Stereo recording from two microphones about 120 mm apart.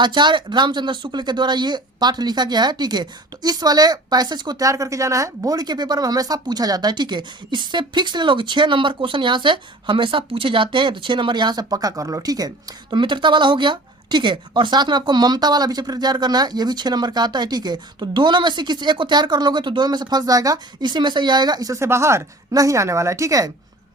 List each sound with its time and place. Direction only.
0.0 s speech: 40° right (ahead or behind)